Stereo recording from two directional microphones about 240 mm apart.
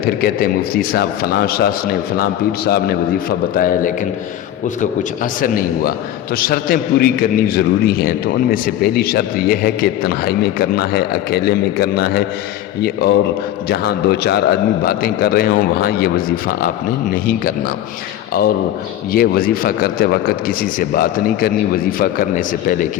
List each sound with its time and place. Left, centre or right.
0.2 s a man's voice: left
19.1 s a man's voice: left